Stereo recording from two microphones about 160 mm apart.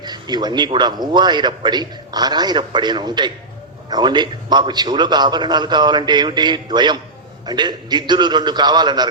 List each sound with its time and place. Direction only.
0.0 s a man's voice: 25° right (ahead or behind)